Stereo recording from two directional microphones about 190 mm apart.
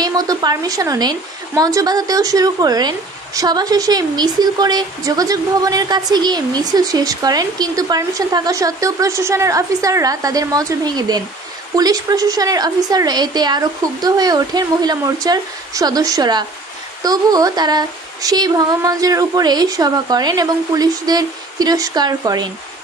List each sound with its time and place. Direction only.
0.0 s speech: 20° right (ahead or behind)